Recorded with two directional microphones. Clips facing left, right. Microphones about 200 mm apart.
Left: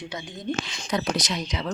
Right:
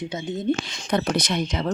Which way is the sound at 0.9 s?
55° right (ahead or behind).